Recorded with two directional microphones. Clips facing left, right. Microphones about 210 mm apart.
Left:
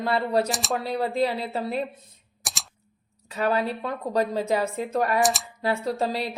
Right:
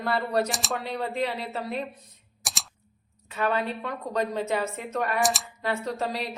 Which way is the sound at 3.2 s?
35° left (ahead or behind).